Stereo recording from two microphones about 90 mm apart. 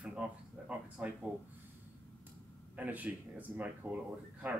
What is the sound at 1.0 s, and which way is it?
Speech, 15° right (ahead or behind).